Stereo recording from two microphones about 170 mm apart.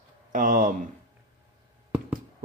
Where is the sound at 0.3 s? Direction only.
55° right (ahead or behind).